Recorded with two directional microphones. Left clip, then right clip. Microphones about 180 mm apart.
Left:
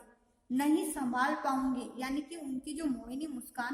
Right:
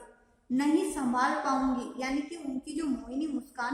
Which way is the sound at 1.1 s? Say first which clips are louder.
Right 3 dB; 45° left (ahead or behind).